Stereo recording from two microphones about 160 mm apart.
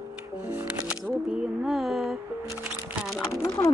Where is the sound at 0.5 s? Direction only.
5° right (ahead or behind).